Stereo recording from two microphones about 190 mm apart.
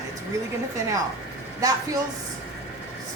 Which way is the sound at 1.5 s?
20° right (ahead or behind).